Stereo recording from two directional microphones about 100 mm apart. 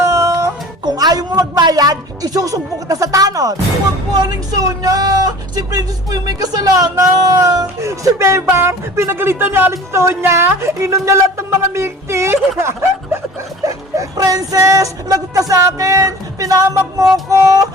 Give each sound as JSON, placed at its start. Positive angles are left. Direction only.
{"t": 0.0, "sound": "a sound", "side_deg": -30}
{"t": 4.1, "sound": "speech", "side_deg": -40}
{"t": 13.7, "sound": "speech", "side_deg": -35}
{"t": 17.2, "sound": "music", "side_deg": -35}